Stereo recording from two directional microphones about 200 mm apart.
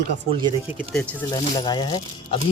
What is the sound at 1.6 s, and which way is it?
Speech, 20° left (ahead or behind).